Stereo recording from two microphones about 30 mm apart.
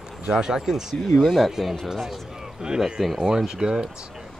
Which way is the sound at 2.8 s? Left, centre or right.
Centre.